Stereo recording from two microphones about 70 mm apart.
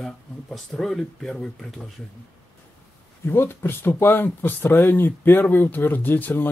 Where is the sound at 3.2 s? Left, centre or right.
Left.